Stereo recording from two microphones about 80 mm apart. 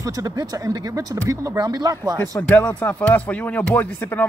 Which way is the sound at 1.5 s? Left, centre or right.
Right.